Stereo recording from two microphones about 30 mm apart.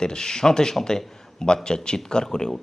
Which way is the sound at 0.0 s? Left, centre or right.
Left.